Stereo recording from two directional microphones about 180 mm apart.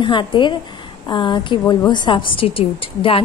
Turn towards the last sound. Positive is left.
turn(degrees=30)  # may be behind; listen again after turning